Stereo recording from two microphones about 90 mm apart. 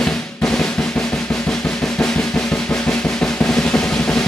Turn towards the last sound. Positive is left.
turn(degrees=10)  # may be behind; listen again after turning